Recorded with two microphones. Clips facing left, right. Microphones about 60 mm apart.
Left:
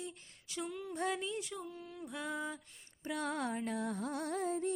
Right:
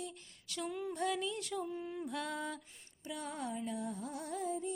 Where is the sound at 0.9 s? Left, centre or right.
Left.